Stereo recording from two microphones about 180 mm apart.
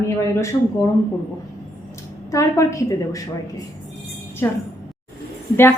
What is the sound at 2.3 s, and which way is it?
Speech, 15° left (ahead or behind).